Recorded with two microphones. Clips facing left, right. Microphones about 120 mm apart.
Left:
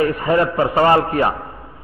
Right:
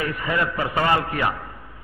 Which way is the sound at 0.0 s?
40° left (ahead or behind).